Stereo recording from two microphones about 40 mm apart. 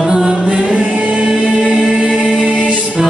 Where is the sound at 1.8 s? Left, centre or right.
Centre.